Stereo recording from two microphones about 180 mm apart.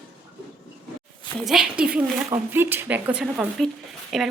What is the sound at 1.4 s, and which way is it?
Speech, centre (ahead or behind).